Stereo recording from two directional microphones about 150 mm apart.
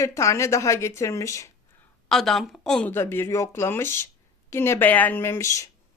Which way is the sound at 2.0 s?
Centre (ahead or behind).